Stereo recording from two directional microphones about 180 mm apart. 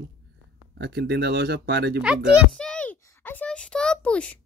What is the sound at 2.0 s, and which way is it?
Speech, 5° right (ahead or behind).